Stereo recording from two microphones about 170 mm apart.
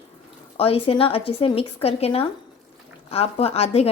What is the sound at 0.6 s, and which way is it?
A woman's voice, 35° left (ahead or behind).